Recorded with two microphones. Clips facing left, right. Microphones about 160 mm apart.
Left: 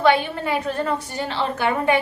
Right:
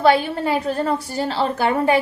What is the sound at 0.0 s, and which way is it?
A woman's voice, 35° right (ahead or behind).